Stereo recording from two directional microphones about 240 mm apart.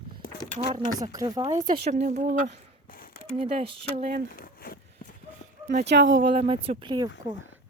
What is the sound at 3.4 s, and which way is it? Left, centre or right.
Speech, right.